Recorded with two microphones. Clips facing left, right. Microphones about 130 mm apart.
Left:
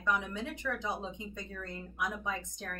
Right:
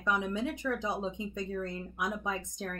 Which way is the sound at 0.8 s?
15° right (ahead or behind).